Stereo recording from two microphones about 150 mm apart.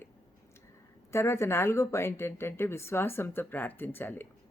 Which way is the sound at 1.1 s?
15° left (ahead or behind).